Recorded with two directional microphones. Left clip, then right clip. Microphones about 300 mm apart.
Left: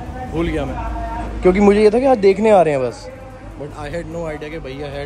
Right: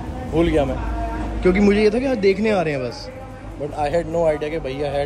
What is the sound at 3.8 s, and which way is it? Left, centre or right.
A man's voice, centre.